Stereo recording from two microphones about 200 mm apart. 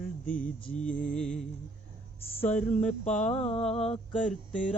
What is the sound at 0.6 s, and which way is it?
Mantra, 35° left (ahead or behind).